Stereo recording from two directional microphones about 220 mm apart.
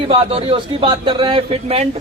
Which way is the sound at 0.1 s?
25° right (ahead or behind).